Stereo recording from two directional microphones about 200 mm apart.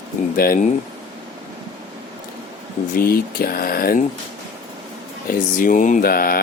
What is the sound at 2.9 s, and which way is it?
Speech, 45° left (ahead or behind).